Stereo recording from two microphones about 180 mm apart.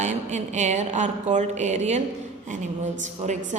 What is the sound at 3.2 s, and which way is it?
Speech, 40° right (ahead or behind).